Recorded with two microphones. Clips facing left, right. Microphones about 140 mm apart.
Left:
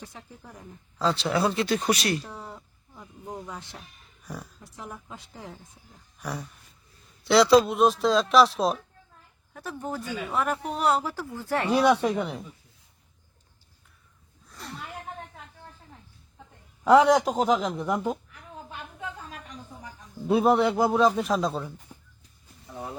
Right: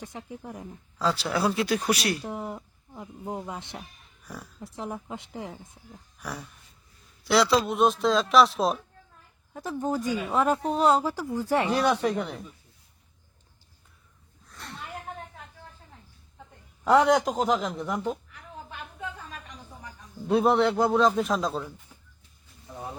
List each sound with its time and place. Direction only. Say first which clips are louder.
0.0 s speech: right 6 dB; 20° right (ahead or behind)
0.9 s a man's voice: left 2 dB; 5° right (ahead or behind)
2.2 s speech: right 7 dB; 20° right (ahead or behind)
5.5 s a man's voice: right 2 dB; centre (ahead or behind)
7.3 s a man's voice: left 4 dB; centre (ahead or behind)
9.5 s a woman's voice: right 5 dB; 20° right (ahead or behind)
11.7 s a man's voice: left 3 dB; 5° left (ahead or behind)
14.4 s a sound: left 1 dB; centre (ahead or behind)
16.8 s a man's voice: left 2 dB; centre (ahead or behind)
20.2 s a man's voice: left 1 dB; centre (ahead or behind)
21.9 s a sound: left 6 dB; 45° left (ahead or behind)